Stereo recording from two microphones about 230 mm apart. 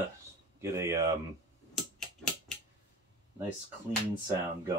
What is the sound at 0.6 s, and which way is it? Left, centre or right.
Speech, centre.